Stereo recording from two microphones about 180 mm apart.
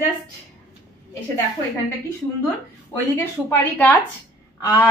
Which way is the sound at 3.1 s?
15° left (ahead or behind).